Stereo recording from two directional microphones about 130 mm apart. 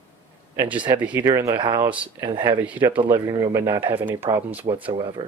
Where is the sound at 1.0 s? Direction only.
10° right (ahead or behind).